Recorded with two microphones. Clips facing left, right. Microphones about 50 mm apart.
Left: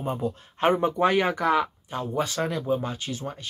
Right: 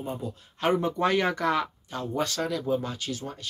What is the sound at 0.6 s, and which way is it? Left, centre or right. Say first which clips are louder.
Speech: left 3 dB; left.